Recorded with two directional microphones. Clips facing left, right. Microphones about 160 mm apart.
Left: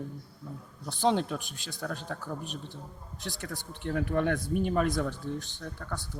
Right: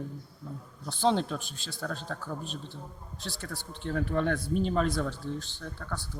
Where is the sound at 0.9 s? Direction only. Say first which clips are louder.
Even; 15° left (ahead or behind).